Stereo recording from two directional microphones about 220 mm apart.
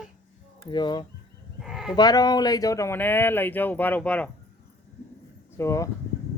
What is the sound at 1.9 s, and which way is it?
Speech, 15° left (ahead or behind).